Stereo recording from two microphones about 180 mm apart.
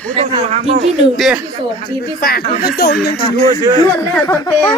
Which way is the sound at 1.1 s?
Centre (ahead or behind).